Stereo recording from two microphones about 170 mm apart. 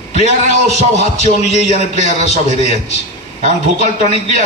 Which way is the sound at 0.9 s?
40° left (ahead or behind).